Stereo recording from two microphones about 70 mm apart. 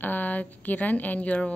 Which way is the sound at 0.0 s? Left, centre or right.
Left.